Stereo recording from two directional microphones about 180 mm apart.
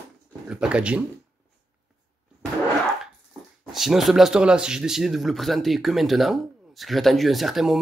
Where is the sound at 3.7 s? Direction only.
Centre (ahead or behind).